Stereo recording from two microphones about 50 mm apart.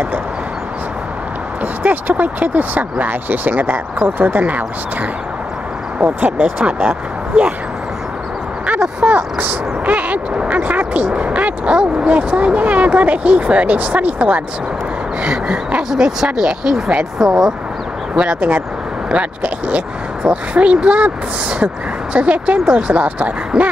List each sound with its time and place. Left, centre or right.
1.6 s speech: right
5.9 s speech: right
9.0 s speech: right; by 17.6 s centre
18.1 s speech: centre